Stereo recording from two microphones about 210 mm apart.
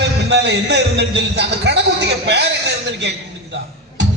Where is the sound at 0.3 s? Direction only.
55° right (ahead or behind).